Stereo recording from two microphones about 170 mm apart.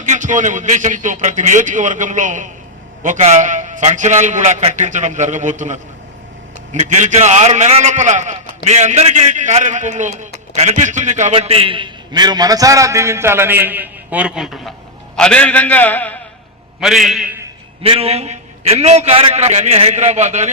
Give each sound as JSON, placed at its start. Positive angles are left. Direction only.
{"t": 0.0, "sound": "a man's voice", "side_deg": -45}
{"t": 16.8, "sound": "a man's voice", "side_deg": 0}
{"t": 17.8, "sound": "a man's voice", "side_deg": -35}